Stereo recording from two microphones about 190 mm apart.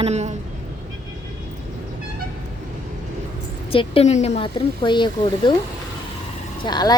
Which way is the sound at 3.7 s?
30° left (ahead or behind).